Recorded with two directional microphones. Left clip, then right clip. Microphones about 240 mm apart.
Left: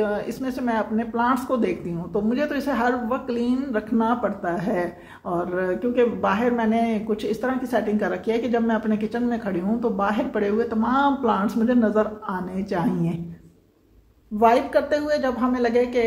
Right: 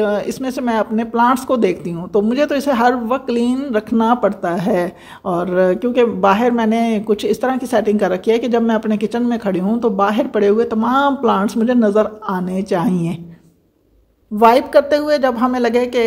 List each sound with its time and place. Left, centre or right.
0.0 s speech: right
14.4 s speech: right